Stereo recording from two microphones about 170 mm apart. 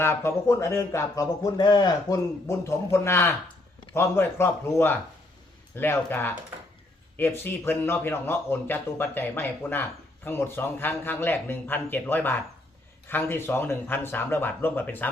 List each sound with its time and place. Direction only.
0.0 s a man's voice: 15° left (ahead or behind)